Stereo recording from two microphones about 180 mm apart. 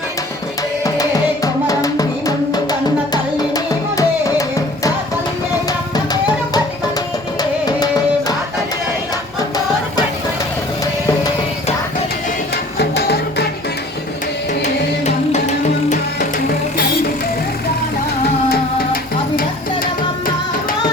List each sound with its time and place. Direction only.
1.6 s music: 20° left (ahead or behind)
12.8 s music: 65° left (ahead or behind)
19.4 s music: 50° left (ahead or behind)